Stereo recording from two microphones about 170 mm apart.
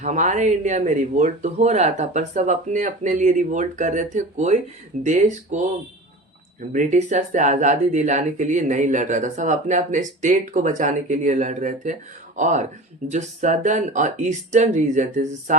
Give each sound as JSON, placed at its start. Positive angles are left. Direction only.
{"t": 0.0, "sound": "speech", "side_deg": -45}